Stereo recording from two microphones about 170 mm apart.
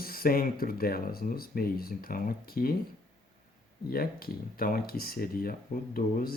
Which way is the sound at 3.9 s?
60° left (ahead or behind).